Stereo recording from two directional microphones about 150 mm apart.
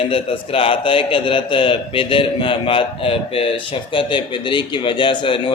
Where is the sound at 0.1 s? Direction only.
35° left (ahead or behind).